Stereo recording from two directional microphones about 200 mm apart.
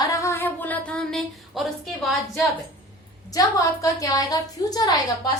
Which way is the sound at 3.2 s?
15° left (ahead or behind).